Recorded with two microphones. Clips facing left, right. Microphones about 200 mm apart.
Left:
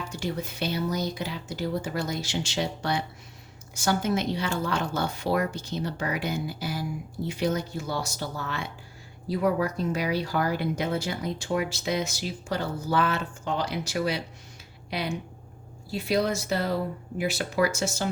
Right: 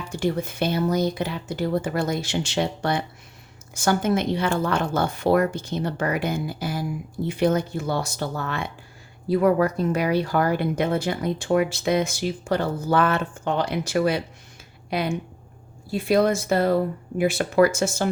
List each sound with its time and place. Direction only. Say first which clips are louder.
0.1 s speech: right 11 dB; 55° right (ahead or behind)